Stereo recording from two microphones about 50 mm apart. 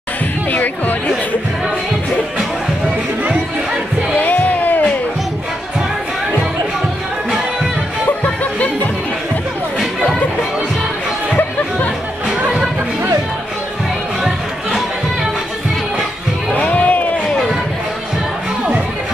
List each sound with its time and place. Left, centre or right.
0.5 s music: left
4.1 s music: left
16.5 s crowd: left